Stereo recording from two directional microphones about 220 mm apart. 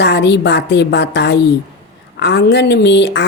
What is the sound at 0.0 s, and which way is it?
Speech, 50° left (ahead or behind).